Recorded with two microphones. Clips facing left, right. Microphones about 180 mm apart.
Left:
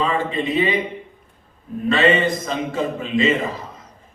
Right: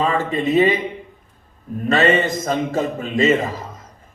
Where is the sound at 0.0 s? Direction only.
45° right (ahead or behind).